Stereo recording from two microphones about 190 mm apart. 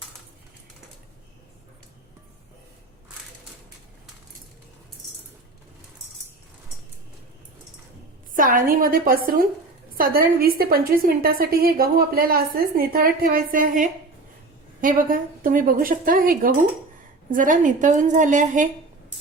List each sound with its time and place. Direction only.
8.4 s a woman's voice: 45° right (ahead or behind)